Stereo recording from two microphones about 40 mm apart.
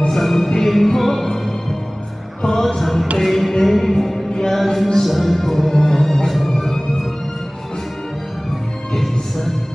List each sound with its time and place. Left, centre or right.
0.1 s music: centre
5.0 s music: centre
9.1 s music: centre